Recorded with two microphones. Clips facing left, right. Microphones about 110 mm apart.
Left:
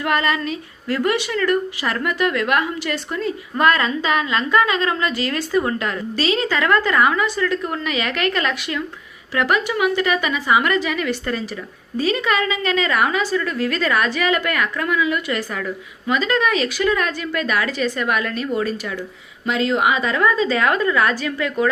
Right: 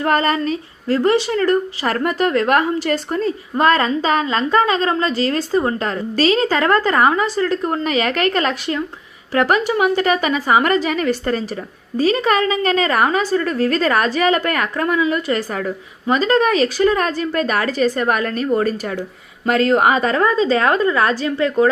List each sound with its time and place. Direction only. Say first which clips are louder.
0.0 s a woman's voice: right 3 dB; 35° right (ahead or behind)